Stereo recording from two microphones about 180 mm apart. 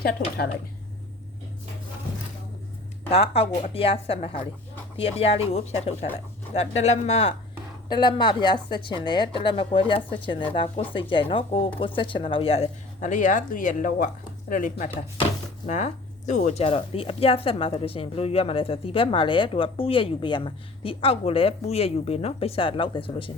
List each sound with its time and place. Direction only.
3.1 s a woman's voice: 35° left (ahead or behind)